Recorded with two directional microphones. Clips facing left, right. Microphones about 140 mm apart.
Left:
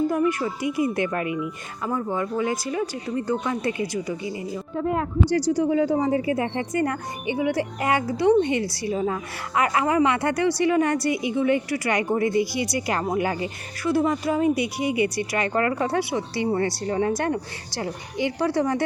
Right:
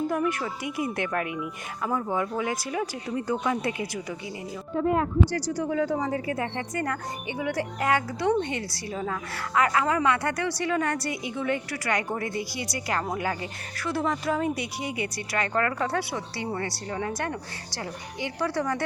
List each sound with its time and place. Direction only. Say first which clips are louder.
0.1 s speech: left 4 dB; centre (ahead or behind)
5.5 s speech: left 5 dB; 15° left (ahead or behind)